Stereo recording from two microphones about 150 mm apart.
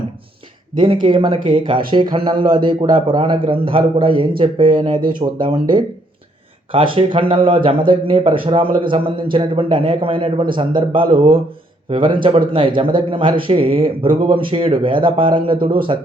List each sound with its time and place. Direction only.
0.8 s speech: 35° right (ahead or behind)
6.7 s speech: 35° right (ahead or behind)